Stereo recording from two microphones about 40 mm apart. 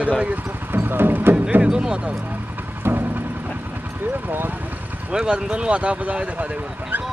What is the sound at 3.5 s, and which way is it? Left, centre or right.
Vehicle, right.